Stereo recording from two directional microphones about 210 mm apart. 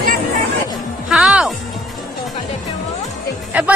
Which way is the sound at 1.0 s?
5° right (ahead or behind).